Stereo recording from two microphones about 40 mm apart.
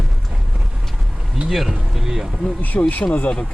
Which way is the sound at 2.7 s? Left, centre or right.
Left.